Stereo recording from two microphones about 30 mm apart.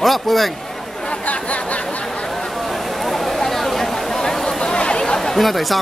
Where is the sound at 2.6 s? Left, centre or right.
Centre.